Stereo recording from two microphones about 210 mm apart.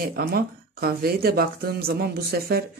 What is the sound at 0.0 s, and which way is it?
Speech, 45° right (ahead or behind).